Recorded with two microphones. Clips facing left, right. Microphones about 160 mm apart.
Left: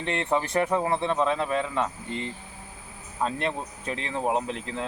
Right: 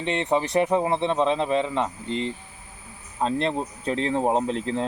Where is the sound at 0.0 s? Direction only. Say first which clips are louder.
Right 3 dB; 20° right (ahead or behind).